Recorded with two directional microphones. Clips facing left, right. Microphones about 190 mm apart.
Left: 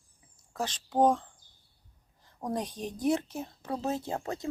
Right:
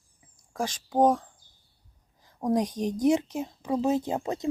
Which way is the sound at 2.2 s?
15° right (ahead or behind).